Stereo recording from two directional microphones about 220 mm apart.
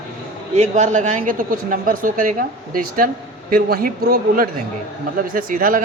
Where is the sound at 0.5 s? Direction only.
30° right (ahead or behind).